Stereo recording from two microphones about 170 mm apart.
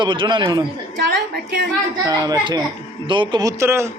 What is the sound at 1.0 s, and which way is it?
Speech, 80° right.